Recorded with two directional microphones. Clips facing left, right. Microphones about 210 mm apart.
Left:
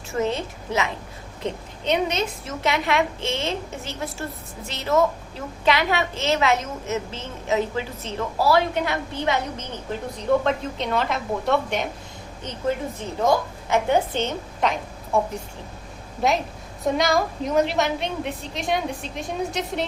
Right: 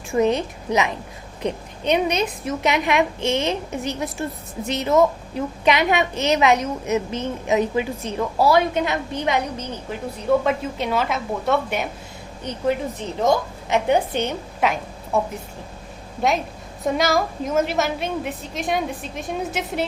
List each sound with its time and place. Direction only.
0.1 s a woman's voice: 15° right (ahead or behind)
12.5 s a woman's voice: 15° right (ahead or behind)
15.1 s a woman's voice: centre (ahead or behind)
16.8 s a woman's voice: centre (ahead or behind)